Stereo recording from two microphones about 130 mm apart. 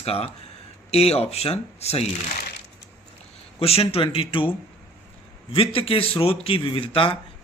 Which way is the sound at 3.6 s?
50° left (ahead or behind).